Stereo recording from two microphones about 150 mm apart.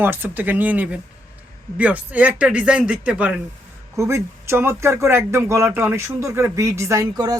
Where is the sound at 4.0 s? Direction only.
20° right (ahead or behind).